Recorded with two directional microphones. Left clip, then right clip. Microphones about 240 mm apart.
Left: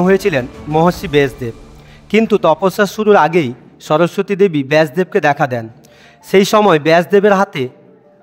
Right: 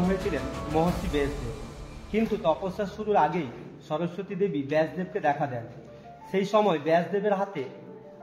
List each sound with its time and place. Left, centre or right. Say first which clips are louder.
0.3 s a man's voice: left 13 dB; left